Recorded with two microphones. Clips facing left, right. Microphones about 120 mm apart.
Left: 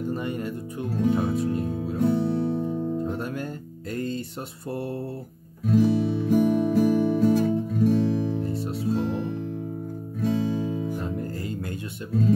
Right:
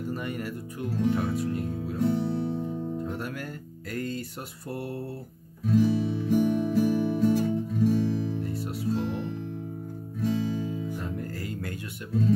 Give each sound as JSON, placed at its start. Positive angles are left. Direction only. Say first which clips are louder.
{"t": 0.1, "sound": "speech", "louder": "left 4 dB", "side_deg": 25}
{"t": 2.0, "sound": "music", "louder": "left 3 dB", "side_deg": 55}
{"t": 3.0, "sound": "guitar", "louder": "left 4 dB", "side_deg": 25}
{"t": 3.9, "sound": "speech", "louder": "left 3 dB", "side_deg": 25}
{"t": 5.7, "sound": "music", "louder": "left 3 dB", "side_deg": 60}
{"t": 8.4, "sound": "music", "louder": "left 4 dB", "side_deg": 25}
{"t": 8.9, "sound": "music", "louder": "left 4 dB", "side_deg": 50}
{"t": 11.0, "sound": "music", "louder": "left 4 dB", "side_deg": 25}